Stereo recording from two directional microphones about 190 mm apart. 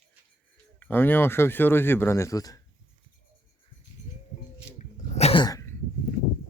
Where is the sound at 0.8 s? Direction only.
10° left (ahead or behind).